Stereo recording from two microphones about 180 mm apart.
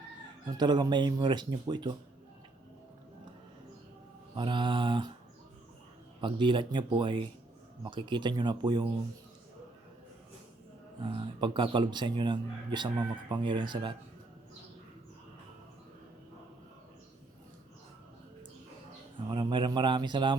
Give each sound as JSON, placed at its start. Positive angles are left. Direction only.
{"t": 0.4, "sound": "a man's voice", "side_deg": -25}
{"t": 4.4, "sound": "a man's voice", "side_deg": -25}
{"t": 6.2, "sound": "a man's voice", "side_deg": -25}
{"t": 11.0, "sound": "a man's voice", "side_deg": -30}
{"t": 19.3, "sound": "a man's voice", "side_deg": -25}